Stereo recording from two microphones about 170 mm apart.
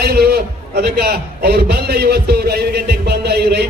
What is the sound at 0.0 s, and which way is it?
A man's voice, 70° right (ahead or behind).